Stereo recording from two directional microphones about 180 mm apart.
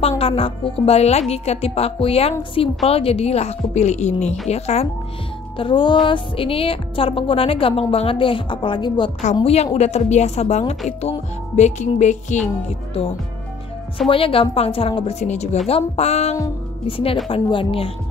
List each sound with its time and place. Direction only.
0.2 s a woman's voice: 30° left (ahead or behind)
9.4 s a woman's voice: 35° left (ahead or behind)
14.0 s a woman's voice: 30° left (ahead or behind)